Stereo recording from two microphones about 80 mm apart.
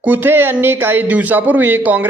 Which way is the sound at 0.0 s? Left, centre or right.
Right.